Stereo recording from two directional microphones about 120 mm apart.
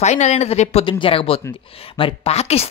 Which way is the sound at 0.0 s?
80° left.